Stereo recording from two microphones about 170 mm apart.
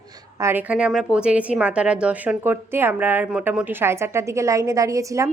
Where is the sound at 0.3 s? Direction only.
15° right (ahead or behind).